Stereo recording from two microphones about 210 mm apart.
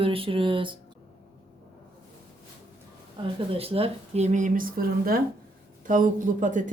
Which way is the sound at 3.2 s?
25° right (ahead or behind).